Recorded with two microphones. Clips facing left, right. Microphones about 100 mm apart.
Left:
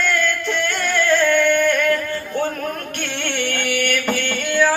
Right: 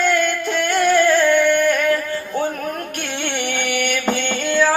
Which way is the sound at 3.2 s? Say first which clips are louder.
Even; 15° right (ahead or behind).